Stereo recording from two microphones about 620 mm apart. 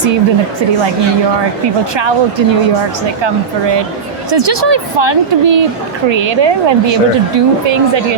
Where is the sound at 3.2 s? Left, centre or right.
Right.